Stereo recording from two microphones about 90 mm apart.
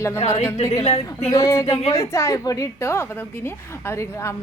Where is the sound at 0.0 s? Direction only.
30° left (ahead or behind).